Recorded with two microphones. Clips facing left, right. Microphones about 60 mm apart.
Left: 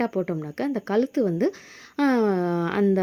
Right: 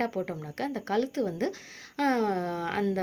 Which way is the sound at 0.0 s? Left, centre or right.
Left.